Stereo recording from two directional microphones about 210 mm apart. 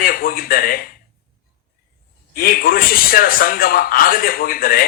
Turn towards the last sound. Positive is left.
turn(degrees=45)  # may be behind; listen again after turning